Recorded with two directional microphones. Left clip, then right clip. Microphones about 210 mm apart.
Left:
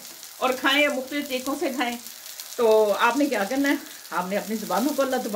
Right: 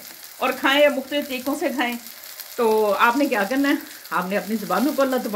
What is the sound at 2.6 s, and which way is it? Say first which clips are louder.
Speech: right 1 dB; 50° right (ahead or behind).